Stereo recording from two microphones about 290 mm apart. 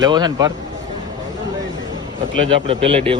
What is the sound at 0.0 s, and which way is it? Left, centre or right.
Speech, centre.